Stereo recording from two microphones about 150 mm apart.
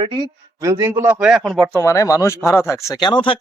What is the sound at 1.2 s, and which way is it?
Speech, centre (ahead or behind).